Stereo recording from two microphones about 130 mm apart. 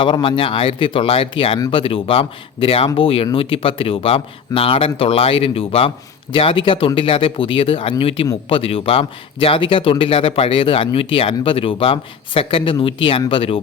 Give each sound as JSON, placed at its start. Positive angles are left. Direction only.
{"t": 0.0, "sound": "a man's voice", "side_deg": 40}